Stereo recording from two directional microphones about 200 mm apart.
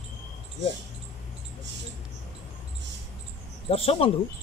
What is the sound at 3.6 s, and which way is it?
Speech, 30° left (ahead or behind).